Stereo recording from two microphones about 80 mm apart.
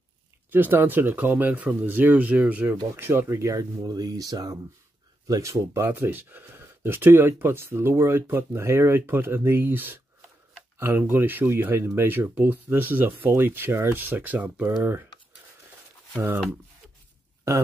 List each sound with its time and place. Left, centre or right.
0.5 s speech: right
3.8 s speech: right
11.0 s speech: right